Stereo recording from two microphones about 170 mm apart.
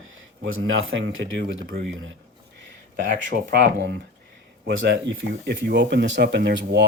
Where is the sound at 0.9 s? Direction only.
90° right.